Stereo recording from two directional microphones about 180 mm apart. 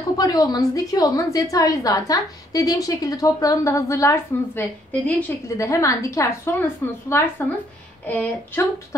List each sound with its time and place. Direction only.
0.2 s a woman's voice: 20° left (ahead or behind)